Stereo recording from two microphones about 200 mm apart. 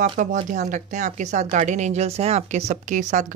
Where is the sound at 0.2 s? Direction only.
40° right (ahead or behind).